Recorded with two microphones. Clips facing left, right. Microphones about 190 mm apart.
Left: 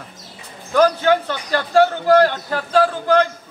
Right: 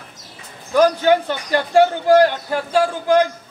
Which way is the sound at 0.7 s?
15° right (ahead or behind).